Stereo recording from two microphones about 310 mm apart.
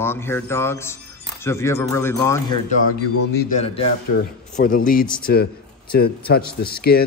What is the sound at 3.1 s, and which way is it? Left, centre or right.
Speech, left.